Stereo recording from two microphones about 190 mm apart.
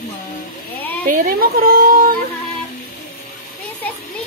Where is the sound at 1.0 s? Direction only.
50° right (ahead or behind).